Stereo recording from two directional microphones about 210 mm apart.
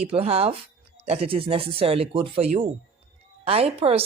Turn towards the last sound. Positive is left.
turn(degrees=-30)  # may be behind; listen again after turning